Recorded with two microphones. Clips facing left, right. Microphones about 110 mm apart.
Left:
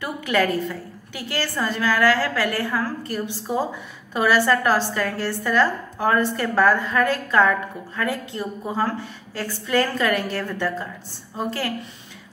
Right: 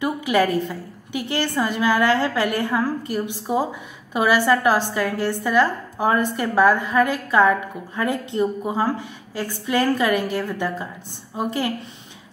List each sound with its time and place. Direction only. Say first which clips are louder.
0.0 s a woman's voice: right 3 dB; 15° right (ahead or behind)